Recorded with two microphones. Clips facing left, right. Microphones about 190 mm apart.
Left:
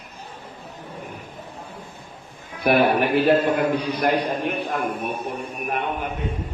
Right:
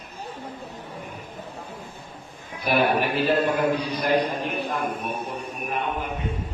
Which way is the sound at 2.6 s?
60° left (ahead or behind).